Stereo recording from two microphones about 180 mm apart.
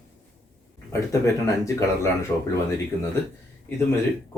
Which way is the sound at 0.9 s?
15° left (ahead or behind).